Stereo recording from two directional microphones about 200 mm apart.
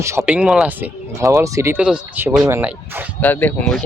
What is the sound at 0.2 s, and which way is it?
Speech, 5° right (ahead or behind).